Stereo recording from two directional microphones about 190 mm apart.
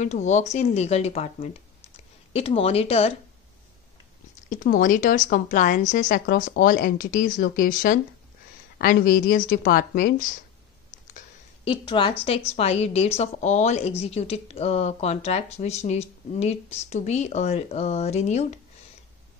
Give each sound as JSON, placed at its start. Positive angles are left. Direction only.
{"t": 0.0, "sound": "a woman's voice", "side_deg": 35}
{"t": 4.5, "sound": "speech", "side_deg": 45}
{"t": 11.6, "sound": "a woman's voice", "side_deg": 25}